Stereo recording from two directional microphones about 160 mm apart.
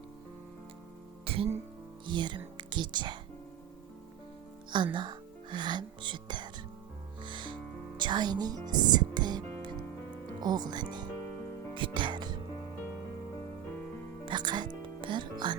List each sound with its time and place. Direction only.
1.2 s music: 35° right (ahead or behind)
2.6 s speech: 30° right (ahead or behind)
4.7 s speech: 30° right (ahead or behind)
7.2 s music: 30° right (ahead or behind)
10.4 s speech: 25° right (ahead or behind)
14.3 s speech: 30° right (ahead or behind)